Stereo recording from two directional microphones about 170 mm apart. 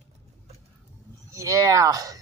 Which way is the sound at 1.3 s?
20° right (ahead or behind).